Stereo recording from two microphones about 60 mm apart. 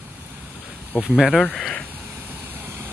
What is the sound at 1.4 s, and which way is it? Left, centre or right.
Speech, left.